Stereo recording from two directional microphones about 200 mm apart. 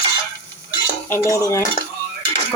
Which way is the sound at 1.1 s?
15° left (ahead or behind).